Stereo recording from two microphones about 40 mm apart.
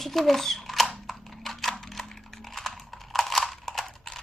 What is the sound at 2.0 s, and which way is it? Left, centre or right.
Typing, centre.